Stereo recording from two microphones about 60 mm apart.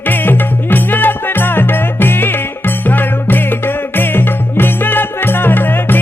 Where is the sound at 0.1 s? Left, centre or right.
Left.